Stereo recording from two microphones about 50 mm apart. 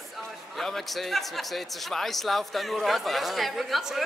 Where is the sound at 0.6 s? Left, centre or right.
Centre.